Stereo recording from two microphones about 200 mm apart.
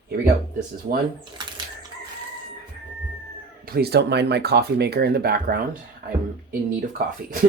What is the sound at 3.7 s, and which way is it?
Speech, 55° right (ahead or behind).